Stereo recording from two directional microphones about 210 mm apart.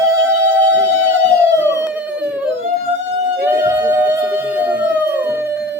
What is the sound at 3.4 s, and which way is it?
Music, 10° right (ahead or behind).